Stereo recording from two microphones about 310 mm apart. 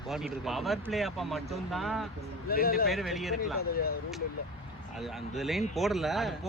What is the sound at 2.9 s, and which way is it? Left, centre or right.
Speech, centre.